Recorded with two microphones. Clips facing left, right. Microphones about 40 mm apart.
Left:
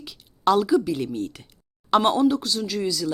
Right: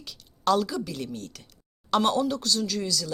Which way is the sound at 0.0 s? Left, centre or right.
Centre.